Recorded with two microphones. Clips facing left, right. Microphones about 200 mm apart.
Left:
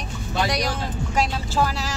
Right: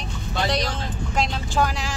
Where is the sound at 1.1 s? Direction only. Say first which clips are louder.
Even; 5° left (ahead or behind).